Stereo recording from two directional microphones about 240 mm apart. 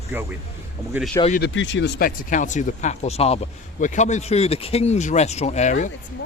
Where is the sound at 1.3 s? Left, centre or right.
Left.